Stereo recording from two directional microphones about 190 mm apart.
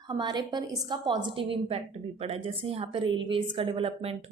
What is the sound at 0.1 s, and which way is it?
A woman's voice, 25° right (ahead or behind).